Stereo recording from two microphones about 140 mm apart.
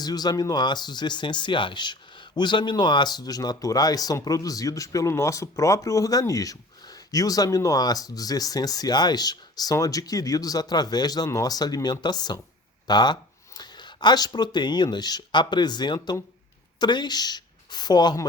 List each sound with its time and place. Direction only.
0.0 s speech: 30° left (ahead or behind)